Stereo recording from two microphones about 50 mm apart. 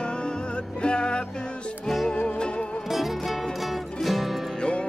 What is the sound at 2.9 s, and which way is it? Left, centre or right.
Music, centre.